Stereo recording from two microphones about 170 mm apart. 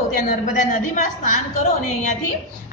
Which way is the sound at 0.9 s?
45° left (ahead or behind).